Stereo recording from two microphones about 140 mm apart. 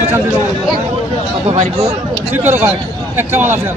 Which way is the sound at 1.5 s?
50° right (ahead or behind).